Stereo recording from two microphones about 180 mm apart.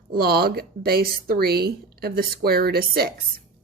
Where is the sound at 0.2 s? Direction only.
60° right (ahead or behind).